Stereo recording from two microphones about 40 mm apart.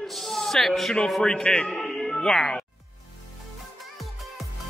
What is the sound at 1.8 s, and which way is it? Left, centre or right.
Music, centre.